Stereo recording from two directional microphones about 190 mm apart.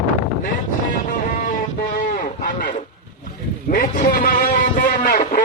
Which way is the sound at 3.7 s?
45° left (ahead or behind).